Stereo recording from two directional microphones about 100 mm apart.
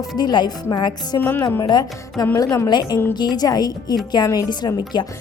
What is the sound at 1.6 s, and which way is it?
A woman's voice, 45° left (ahead or behind).